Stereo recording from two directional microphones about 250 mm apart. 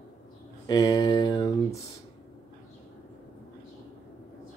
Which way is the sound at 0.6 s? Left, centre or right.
Centre.